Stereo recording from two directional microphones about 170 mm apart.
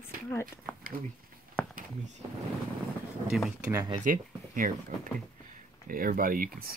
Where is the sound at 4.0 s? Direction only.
50° right (ahead or behind).